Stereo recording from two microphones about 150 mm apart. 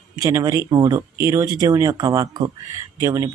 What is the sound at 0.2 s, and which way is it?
Speech, 20° right (ahead or behind).